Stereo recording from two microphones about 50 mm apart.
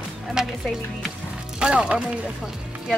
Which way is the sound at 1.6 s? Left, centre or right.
Right.